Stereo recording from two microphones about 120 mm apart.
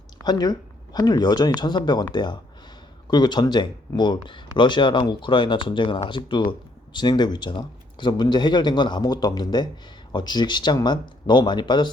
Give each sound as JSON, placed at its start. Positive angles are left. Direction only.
{"t": 0.2, "sound": "speech", "side_deg": 35}